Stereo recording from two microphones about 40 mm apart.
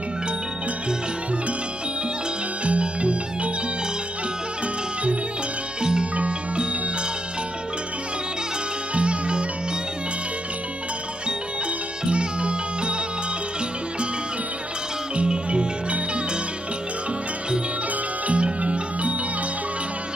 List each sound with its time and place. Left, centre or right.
2.6 s music: right
5.8 s music: right
8.9 s music: right
12.0 s music: right
15.1 s music: right
18.2 s music: right